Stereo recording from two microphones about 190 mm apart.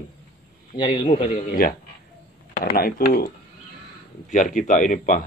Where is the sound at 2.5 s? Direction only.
50° left (ahead or behind).